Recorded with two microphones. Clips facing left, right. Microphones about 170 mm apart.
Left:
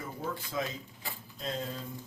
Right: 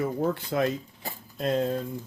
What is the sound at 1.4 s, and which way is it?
Speech, 60° right (ahead or behind).